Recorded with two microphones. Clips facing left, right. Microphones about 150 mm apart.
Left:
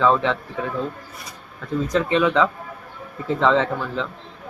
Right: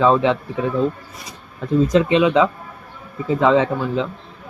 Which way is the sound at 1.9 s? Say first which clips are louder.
Right 2 dB; 20° right (ahead or behind).